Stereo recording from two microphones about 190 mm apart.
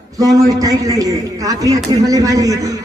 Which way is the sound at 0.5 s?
20° right (ahead or behind).